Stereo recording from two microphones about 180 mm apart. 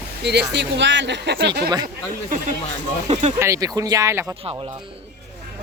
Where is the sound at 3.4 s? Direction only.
15° right (ahead or behind).